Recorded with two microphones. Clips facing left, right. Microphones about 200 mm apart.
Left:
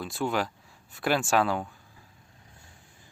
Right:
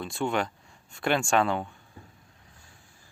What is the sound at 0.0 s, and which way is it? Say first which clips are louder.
Speech: right 1 dB; centre (ahead or behind).